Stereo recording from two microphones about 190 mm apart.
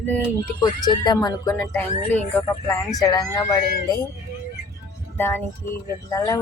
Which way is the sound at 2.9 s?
15° left (ahead or behind).